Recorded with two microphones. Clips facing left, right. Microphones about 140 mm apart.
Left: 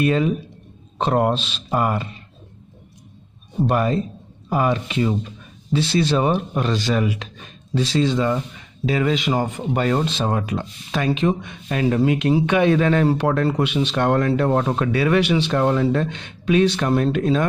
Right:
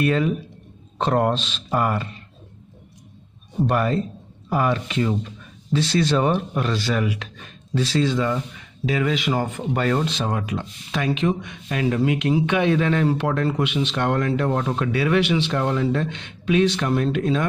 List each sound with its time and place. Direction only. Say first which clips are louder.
0.0 s speech: left 2 dB; 20° left (ahead or behind)
3.6 s speech: left 1 dB; 15° left (ahead or behind); by 17.5 s 40° left (ahead or behind)